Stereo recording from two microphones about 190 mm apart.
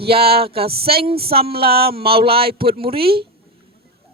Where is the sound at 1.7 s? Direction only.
55° right (ahead or behind).